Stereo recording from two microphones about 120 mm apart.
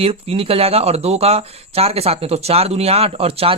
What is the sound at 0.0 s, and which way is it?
Speech, 55° right (ahead or behind).